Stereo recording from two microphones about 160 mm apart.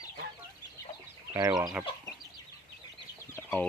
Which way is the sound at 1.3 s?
20° right (ahead or behind).